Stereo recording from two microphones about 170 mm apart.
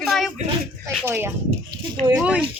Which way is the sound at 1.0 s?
15° right (ahead or behind).